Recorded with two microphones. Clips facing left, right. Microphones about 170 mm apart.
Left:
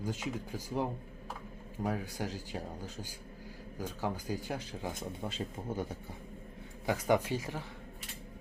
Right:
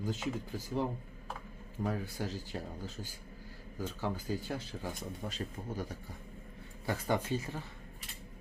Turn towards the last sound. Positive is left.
turn(degrees=10)  # may be behind; listen again after turning